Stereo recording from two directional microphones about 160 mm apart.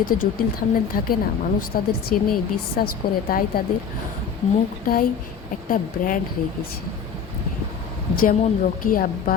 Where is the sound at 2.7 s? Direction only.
65° left (ahead or behind).